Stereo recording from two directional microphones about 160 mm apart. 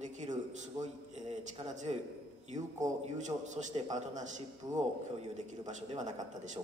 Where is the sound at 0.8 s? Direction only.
20° right (ahead or behind).